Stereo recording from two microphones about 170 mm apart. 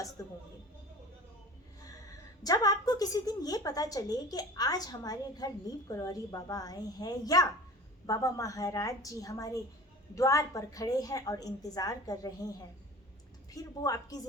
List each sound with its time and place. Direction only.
0.2 s speech: 15° left (ahead or behind)
2.4 s a woman's voice: 20° left (ahead or behind)